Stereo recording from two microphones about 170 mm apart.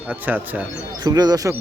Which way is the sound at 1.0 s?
20° right (ahead or behind).